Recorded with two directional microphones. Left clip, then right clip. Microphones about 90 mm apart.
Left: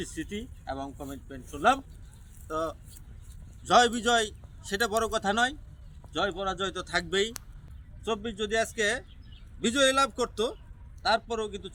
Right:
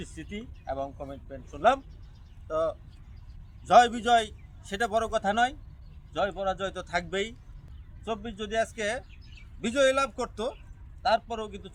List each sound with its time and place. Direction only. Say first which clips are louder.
0.0 s a man's voice: left 4 dB; 40° right (ahead or behind)